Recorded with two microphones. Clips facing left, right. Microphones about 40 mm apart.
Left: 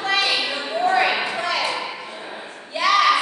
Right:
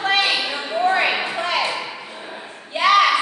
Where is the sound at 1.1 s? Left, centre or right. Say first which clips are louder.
Even; centre.